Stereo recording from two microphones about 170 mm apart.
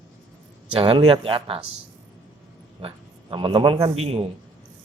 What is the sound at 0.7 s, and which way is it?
Speech, 35° right (ahead or behind).